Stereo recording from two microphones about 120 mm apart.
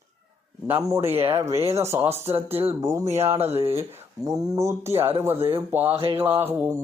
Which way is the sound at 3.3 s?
60° right (ahead or behind).